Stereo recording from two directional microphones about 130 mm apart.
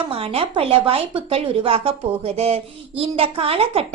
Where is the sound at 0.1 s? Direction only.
50° right (ahead or behind).